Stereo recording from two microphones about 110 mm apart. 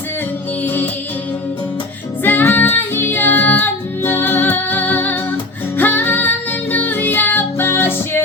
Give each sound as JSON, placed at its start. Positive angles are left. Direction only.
{"t": 0.6, "sound": "music", "side_deg": 15}
{"t": 2.2, "sound": "music", "side_deg": 15}